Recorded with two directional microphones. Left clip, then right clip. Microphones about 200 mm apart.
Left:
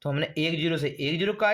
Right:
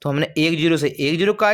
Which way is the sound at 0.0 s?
40° right (ahead or behind).